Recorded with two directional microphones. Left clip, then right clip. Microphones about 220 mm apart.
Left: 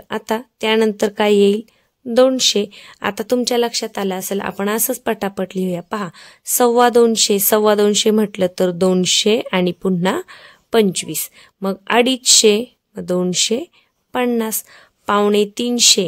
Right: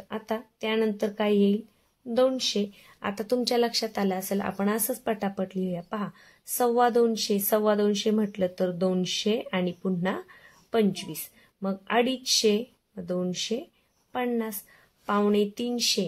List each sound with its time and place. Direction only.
0.1 s a woman's voice: 50° left (ahead or behind)